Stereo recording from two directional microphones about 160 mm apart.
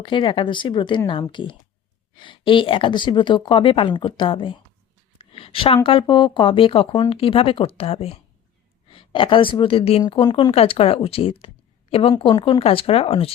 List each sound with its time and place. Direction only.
0.0 s a woman's voice: 30° left (ahead or behind)